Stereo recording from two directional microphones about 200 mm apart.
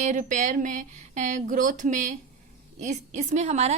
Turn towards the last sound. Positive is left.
turn(degrees=-35)  # may be behind; listen again after turning